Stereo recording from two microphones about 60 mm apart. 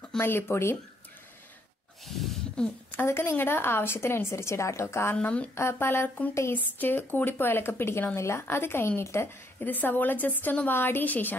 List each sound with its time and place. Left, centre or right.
0.2 s speech: left
2.0 s a sound: centre
3.1 s a woman's voice: left
5.1 s speech: centre
5.5 s a woman's voice: left
9.7 s speech: left